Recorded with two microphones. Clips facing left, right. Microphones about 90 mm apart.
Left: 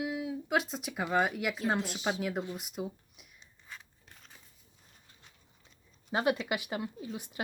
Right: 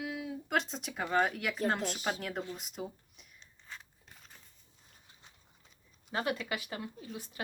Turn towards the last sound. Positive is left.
turn(degrees=20)  # may be behind; listen again after turning